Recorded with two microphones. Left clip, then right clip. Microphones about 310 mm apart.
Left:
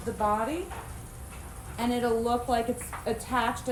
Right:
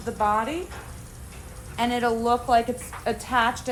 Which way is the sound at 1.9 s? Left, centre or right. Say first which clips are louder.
Right 3 dB; centre.